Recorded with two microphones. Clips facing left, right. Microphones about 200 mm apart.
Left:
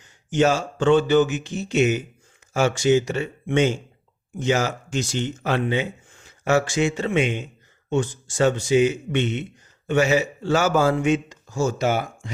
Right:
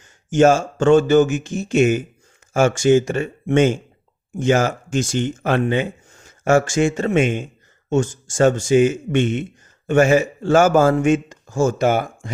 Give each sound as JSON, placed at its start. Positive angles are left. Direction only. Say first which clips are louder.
{"t": 0.0, "sound": "speech", "louder": "right 6 dB", "side_deg": -45}